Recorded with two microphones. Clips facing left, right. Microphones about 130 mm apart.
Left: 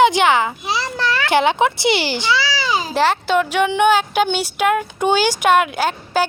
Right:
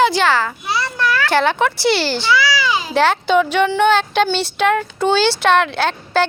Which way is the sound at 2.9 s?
Centre (ahead or behind).